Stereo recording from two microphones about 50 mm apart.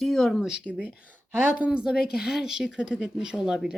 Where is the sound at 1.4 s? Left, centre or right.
Right.